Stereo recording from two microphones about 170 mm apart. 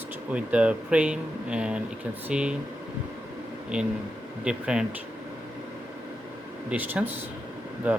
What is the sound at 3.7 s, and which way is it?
Speech, 5° right (ahead or behind).